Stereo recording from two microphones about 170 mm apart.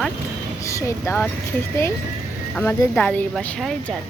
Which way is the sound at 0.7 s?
15° left (ahead or behind).